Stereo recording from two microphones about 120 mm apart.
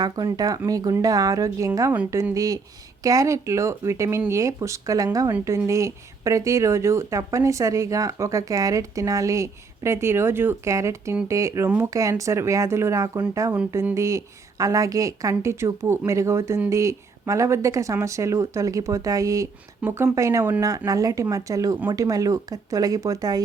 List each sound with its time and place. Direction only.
0.0 s speech: 35° right (ahead or behind)